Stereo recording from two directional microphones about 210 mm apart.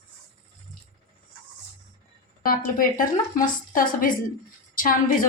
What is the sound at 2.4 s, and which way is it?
A woman's voice, 40° left (ahead or behind).